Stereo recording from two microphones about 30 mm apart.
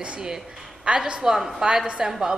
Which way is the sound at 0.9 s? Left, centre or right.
Right.